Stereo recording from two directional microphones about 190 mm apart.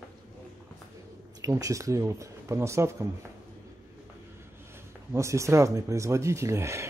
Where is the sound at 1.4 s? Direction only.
15° right (ahead or behind).